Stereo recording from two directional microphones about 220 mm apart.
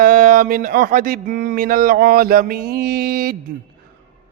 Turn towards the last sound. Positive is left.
turn(degrees=-40)  # may be behind; listen again after turning